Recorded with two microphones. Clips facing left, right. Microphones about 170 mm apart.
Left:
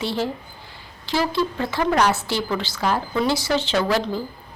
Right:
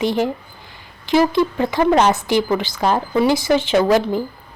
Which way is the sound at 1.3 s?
15° right (ahead or behind).